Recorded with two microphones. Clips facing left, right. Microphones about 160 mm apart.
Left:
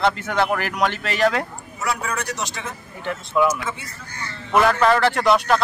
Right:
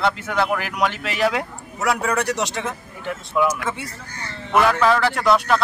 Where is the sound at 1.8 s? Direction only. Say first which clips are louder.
Right 5 dB; 70° right (ahead or behind).